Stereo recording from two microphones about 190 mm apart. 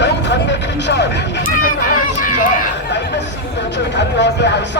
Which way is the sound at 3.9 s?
65° left (ahead or behind).